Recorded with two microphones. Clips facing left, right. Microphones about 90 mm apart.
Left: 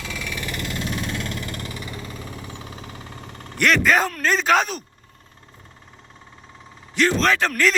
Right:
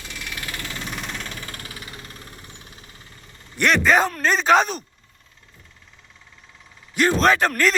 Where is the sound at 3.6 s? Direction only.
5° right (ahead or behind).